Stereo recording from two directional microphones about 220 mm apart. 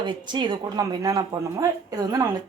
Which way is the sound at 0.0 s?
20° right (ahead or behind).